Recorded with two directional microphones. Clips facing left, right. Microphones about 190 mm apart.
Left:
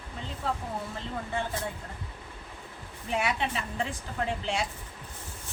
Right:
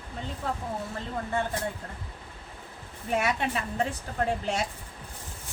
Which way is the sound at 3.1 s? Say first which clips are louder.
Right 2 dB; 45° right (ahead or behind).